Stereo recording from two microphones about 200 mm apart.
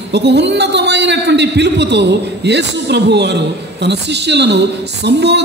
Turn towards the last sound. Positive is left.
turn(degrees=-55)  # may be behind; listen again after turning